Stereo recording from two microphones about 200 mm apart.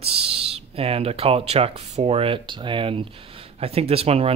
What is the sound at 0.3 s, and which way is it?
Speech, 30° right (ahead or behind).